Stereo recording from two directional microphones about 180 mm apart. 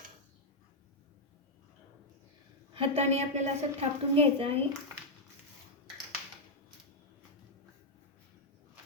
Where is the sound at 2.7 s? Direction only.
30° right (ahead or behind).